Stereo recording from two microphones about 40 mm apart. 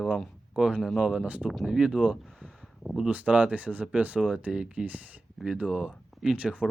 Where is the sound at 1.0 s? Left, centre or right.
Centre.